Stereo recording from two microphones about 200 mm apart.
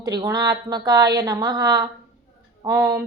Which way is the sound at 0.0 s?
20° right (ahead or behind).